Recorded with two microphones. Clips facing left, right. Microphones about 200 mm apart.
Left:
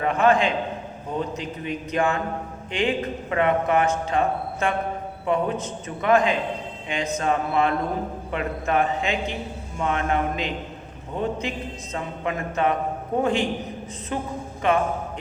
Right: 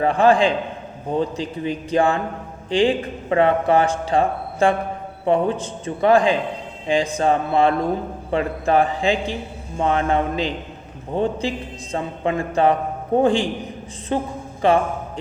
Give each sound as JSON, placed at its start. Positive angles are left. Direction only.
{"t": 0.0, "sound": "a man's voice", "side_deg": -30}